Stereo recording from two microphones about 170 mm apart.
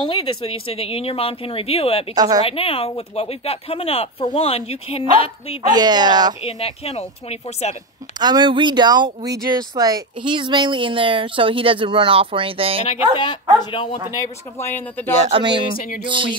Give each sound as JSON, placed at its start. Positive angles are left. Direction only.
{"t": 0.0, "sound": "speech", "side_deg": 30}
{"t": 2.1, "sound": "speech", "side_deg": -20}
{"t": 2.4, "sound": "speech", "side_deg": 35}
{"t": 5.7, "sound": "speech", "side_deg": -25}
{"t": 6.4, "sound": "speech", "side_deg": 35}
{"t": 8.2, "sound": "speech", "side_deg": -25}
{"t": 13.6, "sound": "speech", "side_deg": 30}
{"t": 14.1, "sound": "speech", "side_deg": 15}
{"t": 15.1, "sound": "speech", "side_deg": -40}
{"t": 16.1, "sound": "speech", "side_deg": -30}